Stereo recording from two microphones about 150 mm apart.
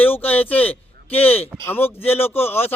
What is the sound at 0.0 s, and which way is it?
A man's voice, 10° left (ahead or behind).